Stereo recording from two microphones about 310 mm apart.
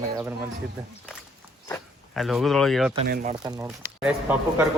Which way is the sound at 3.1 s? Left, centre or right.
Right.